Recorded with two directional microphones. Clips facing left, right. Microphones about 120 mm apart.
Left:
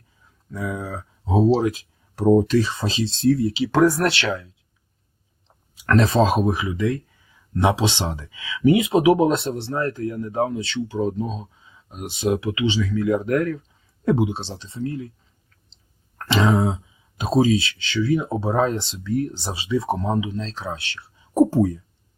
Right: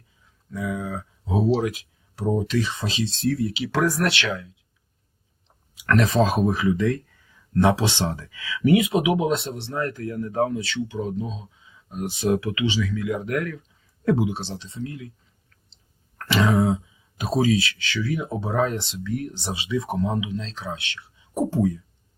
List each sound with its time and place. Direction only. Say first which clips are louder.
0.5 s speech: even; 35° left (ahead or behind)
2.1 s speech: left 7 dB; 45° left (ahead or behind)
5.7 s speech: left 2 dB; 35° left (ahead or behind)
11.6 s speech: right 4 dB; 25° left (ahead or behind)
14.0 s speech: left 1 dB; 25° left (ahead or behind)
16.1 s a sound: left 1 dB; 25° left (ahead or behind)
17.2 s speech: left 3 dB; 25° left (ahead or behind)